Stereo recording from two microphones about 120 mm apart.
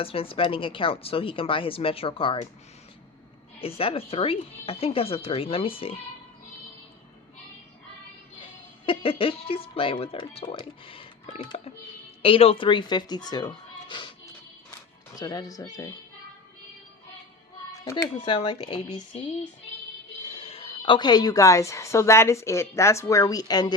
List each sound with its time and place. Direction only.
0.0 s speech: 50° left (ahead or behind)
3.6 s speech: 50° left (ahead or behind)
8.9 s speech: 50° left (ahead or behind); by 15.9 s 30° left (ahead or behind)
18.4 s speech: 50° left (ahead or behind)
20.2 s a woman's voice: 55° left (ahead or behind); by 23.7 s 35° left (ahead or behind)